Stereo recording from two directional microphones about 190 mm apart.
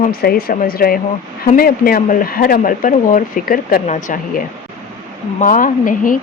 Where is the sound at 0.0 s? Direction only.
50° left (ahead or behind).